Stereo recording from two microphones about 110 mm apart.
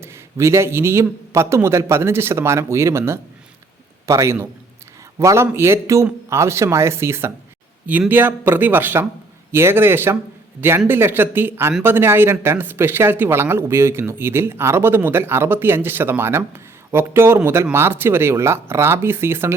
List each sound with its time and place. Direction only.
0.0 s a man's voice: 25° right (ahead or behind)